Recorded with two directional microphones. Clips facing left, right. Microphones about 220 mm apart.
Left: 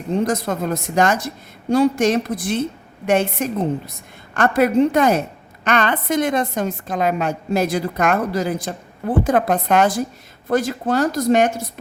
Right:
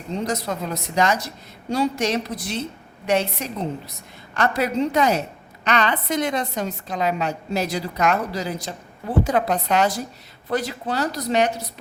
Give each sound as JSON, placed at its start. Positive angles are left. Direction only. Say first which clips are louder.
{"t": 0.1, "sound": "a woman's voice", "louder": "left 6 dB", "side_deg": 50}